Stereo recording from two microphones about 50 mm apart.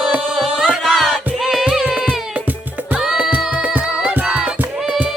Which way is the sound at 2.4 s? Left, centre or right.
Right.